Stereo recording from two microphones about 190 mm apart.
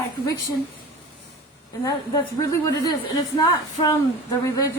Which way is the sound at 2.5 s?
20° left (ahead or behind).